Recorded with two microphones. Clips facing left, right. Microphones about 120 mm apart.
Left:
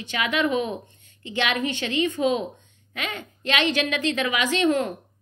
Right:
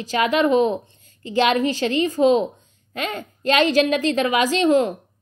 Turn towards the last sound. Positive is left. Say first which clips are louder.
# right 5 dB
turn(degrees=-30)  # may be behind; listen again after turning